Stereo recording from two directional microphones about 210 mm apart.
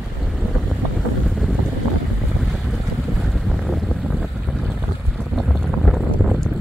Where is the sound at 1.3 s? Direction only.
Centre (ahead or behind).